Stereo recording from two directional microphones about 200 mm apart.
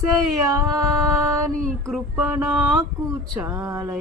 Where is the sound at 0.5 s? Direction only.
15° right (ahead or behind).